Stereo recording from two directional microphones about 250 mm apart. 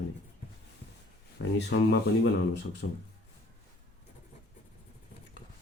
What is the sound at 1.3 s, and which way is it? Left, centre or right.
Speech, left.